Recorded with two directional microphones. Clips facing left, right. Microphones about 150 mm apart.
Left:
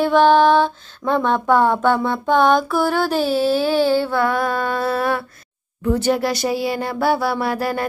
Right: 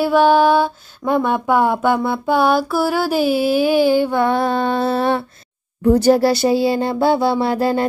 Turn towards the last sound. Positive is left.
turn(degrees=-25)  # may be behind; listen again after turning